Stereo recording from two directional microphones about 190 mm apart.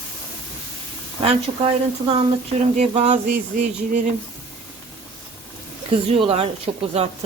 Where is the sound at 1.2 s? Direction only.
30° right (ahead or behind).